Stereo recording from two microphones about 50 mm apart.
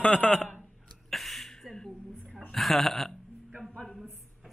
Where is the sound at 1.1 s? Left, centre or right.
Centre.